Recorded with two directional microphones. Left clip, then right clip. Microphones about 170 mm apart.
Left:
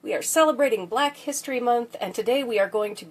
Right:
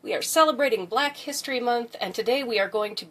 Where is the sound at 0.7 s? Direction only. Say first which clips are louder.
Left 1 dB; 20° left (ahead or behind).